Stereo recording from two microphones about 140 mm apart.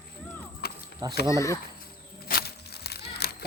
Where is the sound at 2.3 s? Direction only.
90° left.